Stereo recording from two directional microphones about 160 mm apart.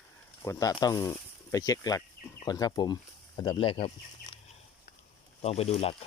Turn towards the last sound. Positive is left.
turn(degrees=40)  # may be behind; listen again after turning